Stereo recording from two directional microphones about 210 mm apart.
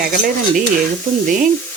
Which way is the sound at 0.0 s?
45° right (ahead or behind).